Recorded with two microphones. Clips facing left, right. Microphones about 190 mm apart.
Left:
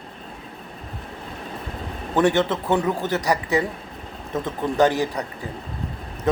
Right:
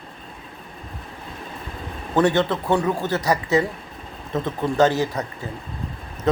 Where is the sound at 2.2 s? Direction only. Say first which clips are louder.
Even; 20° left (ahead or behind).